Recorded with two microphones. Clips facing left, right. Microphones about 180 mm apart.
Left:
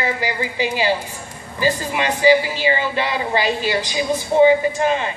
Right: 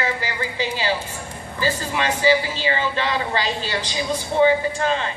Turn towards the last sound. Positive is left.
turn(degrees=15)  # may be behind; listen again after turning